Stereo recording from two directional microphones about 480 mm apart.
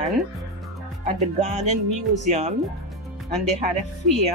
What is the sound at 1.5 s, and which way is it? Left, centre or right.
Speech, right.